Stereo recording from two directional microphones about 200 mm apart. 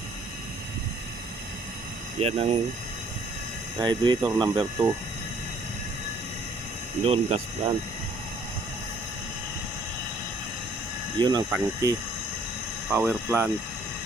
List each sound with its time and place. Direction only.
2.2 s speech: 30° right (ahead or behind)
3.8 s speech: 25° right (ahead or behind)
7.0 s speech: 30° right (ahead or behind)
11.2 s speech: 20° right (ahead or behind)